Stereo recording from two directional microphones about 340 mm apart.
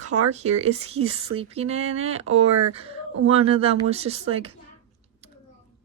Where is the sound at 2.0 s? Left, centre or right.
Right.